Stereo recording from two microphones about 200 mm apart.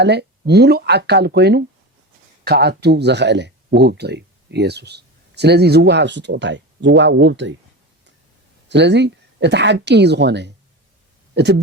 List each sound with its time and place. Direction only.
0.0 s speech: 55° right (ahead or behind)
8.7 s speech: 60° right (ahead or behind)